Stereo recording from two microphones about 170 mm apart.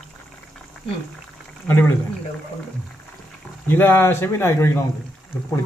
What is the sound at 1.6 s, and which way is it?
Speech, 10° left (ahead or behind).